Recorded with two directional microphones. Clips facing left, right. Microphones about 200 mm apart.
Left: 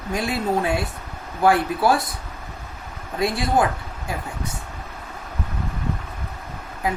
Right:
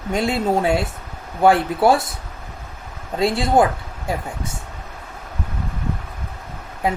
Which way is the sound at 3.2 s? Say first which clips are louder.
Right 4 dB; 25° right (ahead or behind).